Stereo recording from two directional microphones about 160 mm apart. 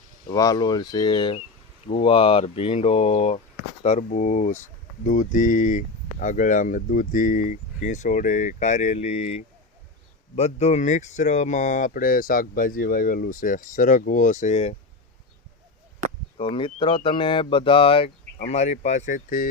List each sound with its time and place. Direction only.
0.3 s speech: 20° left (ahead or behind); by 3.4 s 40° left (ahead or behind)
3.8 s speech: 50° left (ahead or behind)
16.0 s chop: 50° right (ahead or behind)
16.4 s speech: 35° left (ahead or behind); by 19.5 s 55° left (ahead or behind)